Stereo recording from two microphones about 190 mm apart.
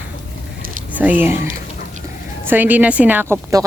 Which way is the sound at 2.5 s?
10° right (ahead or behind).